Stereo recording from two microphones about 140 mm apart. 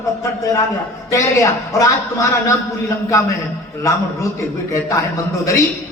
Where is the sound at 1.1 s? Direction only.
20° left (ahead or behind).